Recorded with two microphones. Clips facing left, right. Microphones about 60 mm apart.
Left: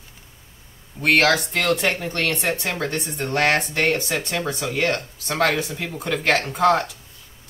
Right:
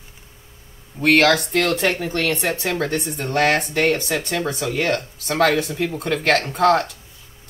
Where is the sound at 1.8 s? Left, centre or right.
Centre.